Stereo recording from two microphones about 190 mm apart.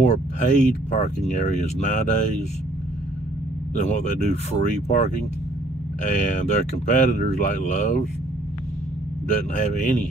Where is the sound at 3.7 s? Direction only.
40° left (ahead or behind).